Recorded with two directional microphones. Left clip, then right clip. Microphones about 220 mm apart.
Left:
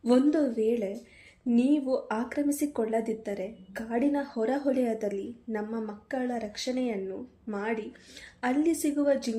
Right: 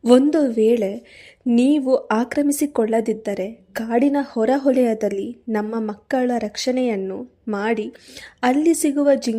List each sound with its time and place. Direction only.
0.0 s speech: 45° right (ahead or behind)